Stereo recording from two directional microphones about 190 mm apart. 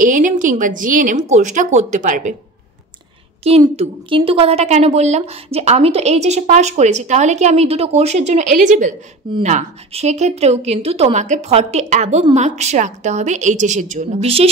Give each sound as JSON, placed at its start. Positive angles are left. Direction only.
{"t": 0.0, "sound": "speech", "side_deg": -45}
{"t": 3.4, "sound": "a woman's voice", "side_deg": -30}